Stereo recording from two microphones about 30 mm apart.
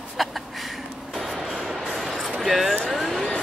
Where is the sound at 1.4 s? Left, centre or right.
Centre.